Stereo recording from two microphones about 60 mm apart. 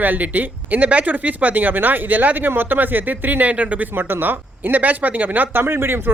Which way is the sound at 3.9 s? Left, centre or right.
Right.